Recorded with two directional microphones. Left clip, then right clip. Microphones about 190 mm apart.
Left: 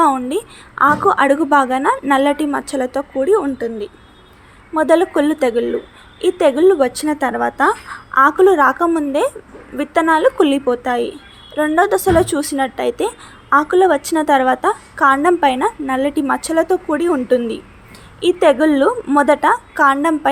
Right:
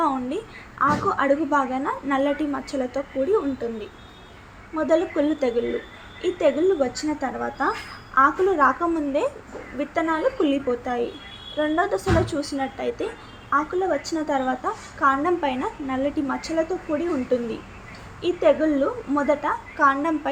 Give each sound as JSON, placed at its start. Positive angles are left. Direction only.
{"t": 0.0, "sound": "a woman's voice", "side_deg": 35}